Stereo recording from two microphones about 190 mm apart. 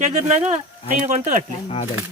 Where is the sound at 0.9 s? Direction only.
40° right (ahead or behind).